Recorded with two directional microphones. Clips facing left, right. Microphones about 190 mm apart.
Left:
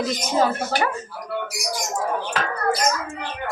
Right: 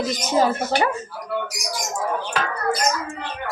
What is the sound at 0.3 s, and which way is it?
Speech, 20° right (ahead or behind).